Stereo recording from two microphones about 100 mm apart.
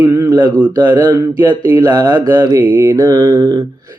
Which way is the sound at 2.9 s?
40° right (ahead or behind).